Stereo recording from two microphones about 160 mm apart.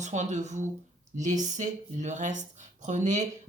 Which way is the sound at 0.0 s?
50° right (ahead or behind).